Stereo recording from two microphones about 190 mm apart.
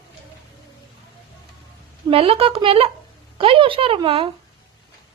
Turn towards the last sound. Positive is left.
turn(degrees=-30)  # may be behind; listen again after turning